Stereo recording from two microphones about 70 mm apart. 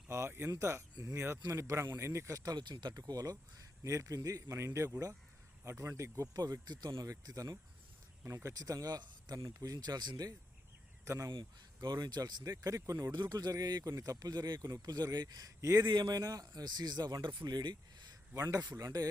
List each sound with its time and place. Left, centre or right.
0.1 s speech: right
2.4 s speech: right
3.8 s speech: right
7.1 s speech: right
9.4 s speech: right
9.7 s speech: right
11.0 s speech: right
11.8 s speech: right
12.8 s speech: right
13.3 s speech: right
15.6 s speech: right
15.9 s a man's voice: right
18.6 s speech: right